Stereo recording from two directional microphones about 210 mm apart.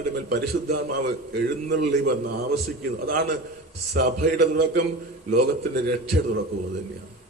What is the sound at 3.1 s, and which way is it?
A man's voice, 50° right (ahead or behind).